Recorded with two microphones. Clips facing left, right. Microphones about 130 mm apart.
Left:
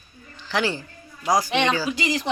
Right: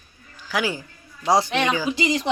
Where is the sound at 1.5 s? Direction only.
5° right (ahead or behind).